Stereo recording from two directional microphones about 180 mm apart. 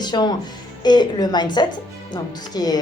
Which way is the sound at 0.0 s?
25° left (ahead or behind).